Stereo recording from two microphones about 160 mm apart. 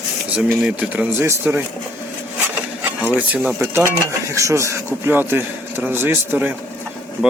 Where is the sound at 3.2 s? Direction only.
10° right (ahead or behind).